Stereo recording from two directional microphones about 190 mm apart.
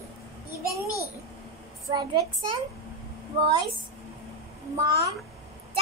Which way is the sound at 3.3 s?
25° right (ahead or behind).